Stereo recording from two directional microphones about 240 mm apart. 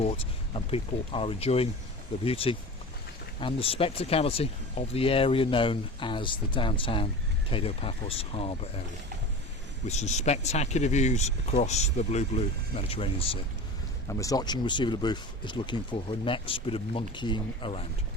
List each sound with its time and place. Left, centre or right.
0.0 s speech: left
9.8 s speech: left